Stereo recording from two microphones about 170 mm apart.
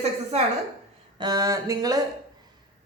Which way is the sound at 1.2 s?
20° right (ahead or behind).